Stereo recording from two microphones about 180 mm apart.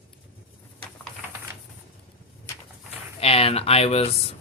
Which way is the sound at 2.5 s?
15° left (ahead or behind).